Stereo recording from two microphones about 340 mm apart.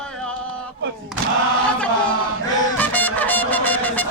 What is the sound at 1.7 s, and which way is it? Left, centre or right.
Chant, centre.